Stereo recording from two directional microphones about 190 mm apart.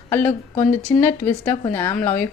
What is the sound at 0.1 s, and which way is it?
A woman's voice, 10° left (ahead or behind).